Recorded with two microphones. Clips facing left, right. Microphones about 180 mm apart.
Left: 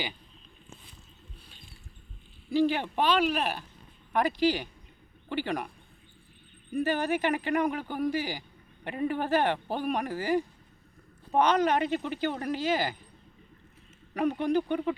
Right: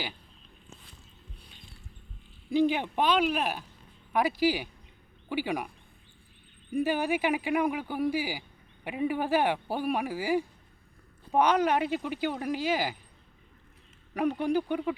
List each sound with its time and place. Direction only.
2.5 s speech: 15° right (ahead or behind)
6.7 s speech: 10° right (ahead or behind)
14.1 s speech: 10° right (ahead or behind)